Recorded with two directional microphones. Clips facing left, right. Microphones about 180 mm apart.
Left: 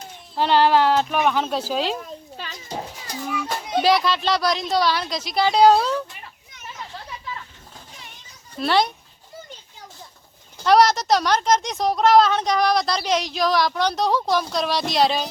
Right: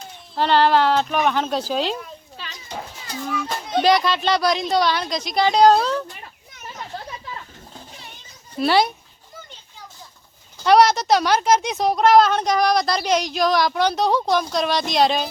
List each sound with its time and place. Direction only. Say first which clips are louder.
0.3 s speech: even; 10° left (ahead or behind)
2.0 s children playing: left 2 dB; 40° left (ahead or behind)
3.2 s speech: even; 10° left (ahead or behind)
8.5 s speech: right 2 dB; 5° right (ahead or behind)
10.6 s speech: right 1 dB; centre (ahead or behind)